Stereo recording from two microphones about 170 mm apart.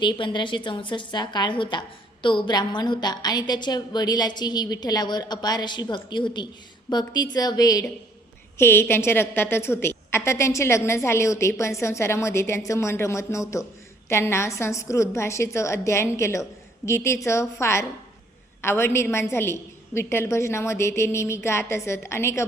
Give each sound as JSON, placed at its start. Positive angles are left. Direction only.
{"t": 0.0, "sound": "a woman's voice", "side_deg": 25}